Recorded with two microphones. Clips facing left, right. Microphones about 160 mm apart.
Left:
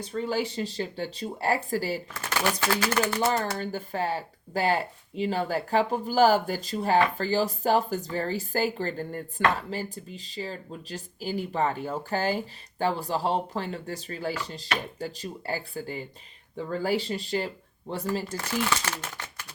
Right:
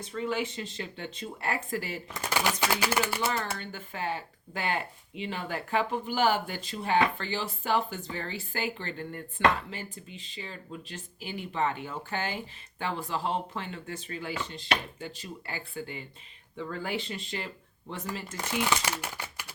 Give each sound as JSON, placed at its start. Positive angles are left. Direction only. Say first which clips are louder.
{"t": 0.0, "sound": "speech", "louder": "left 3 dB", "side_deg": 35}
{"t": 2.1, "sound": "speech", "louder": "right 2 dB", "side_deg": -15}
{"t": 3.2, "sound": "speech", "louder": "left 5 dB", "side_deg": 40}
{"t": 18.3, "sound": "speech", "louder": "left 1 dB", "side_deg": -15}